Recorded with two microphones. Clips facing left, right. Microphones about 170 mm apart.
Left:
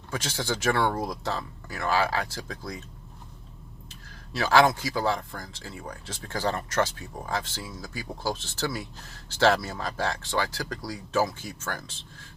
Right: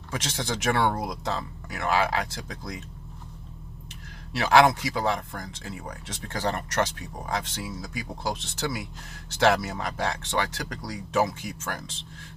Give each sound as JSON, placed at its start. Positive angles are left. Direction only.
{"t": 0.1, "sound": "speech", "side_deg": -20}
{"t": 4.4, "sound": "speech", "side_deg": -20}